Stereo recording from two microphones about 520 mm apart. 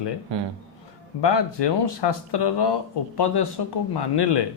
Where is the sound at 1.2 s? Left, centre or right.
Left.